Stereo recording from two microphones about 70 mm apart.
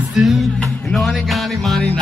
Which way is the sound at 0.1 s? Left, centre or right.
Centre.